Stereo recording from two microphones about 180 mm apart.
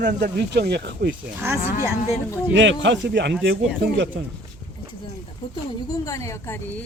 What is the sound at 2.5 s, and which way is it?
Speech, 90° right.